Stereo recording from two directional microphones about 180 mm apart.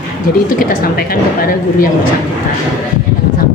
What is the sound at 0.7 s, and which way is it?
Speech, 55° left (ahead or behind).